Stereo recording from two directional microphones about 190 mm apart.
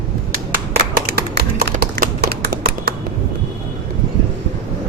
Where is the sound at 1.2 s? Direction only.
55° right (ahead or behind).